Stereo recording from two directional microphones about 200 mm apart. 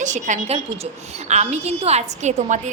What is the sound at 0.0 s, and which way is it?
A woman's voice, 35° right (ahead or behind).